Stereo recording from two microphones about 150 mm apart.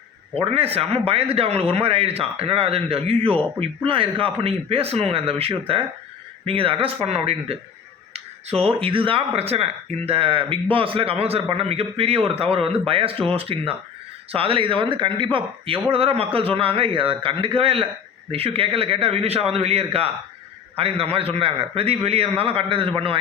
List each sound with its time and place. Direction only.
0.3 s speech: 40° right (ahead or behind)